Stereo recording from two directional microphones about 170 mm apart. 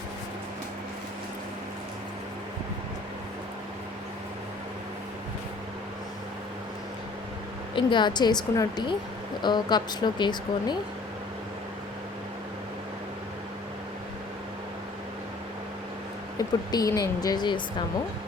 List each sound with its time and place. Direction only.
7.8 s speech: 30° left (ahead or behind)
16.4 s speech: 20° left (ahead or behind)